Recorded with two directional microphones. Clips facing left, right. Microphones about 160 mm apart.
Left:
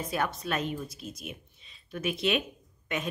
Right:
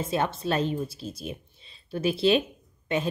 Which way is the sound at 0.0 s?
25° right (ahead or behind).